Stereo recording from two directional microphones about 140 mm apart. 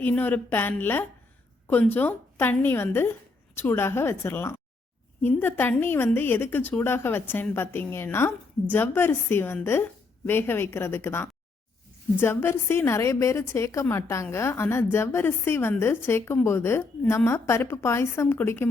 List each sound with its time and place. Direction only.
0.0 s a woman's voice: 15° left (ahead or behind)